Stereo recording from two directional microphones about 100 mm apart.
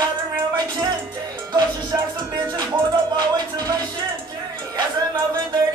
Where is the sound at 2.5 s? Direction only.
40° right (ahead or behind).